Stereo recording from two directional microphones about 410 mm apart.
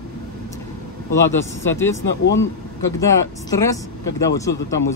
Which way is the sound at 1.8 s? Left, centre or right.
Centre.